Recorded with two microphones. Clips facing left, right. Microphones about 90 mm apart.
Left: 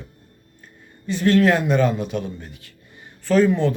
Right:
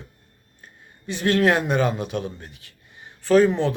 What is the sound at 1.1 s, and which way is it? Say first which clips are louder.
Speech: left 3 dB; 20° right (ahead or behind).